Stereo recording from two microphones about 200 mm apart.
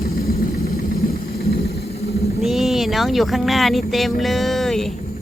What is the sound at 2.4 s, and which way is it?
Speech, centre (ahead or behind).